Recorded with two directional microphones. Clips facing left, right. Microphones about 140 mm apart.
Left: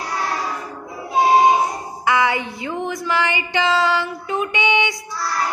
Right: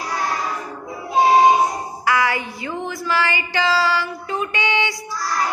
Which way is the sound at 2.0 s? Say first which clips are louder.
Left 2 dB; 20° left (ahead or behind).